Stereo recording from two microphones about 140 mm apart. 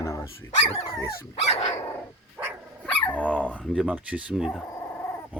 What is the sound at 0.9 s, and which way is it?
Speech, 20° left (ahead or behind).